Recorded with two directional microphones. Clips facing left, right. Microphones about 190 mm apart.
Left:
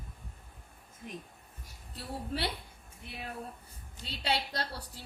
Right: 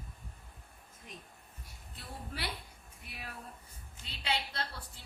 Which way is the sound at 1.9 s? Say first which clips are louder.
Left 8 dB; 30° left (ahead or behind).